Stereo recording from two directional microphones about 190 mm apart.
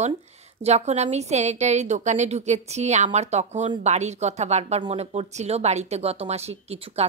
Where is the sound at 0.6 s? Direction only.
35° right (ahead or behind).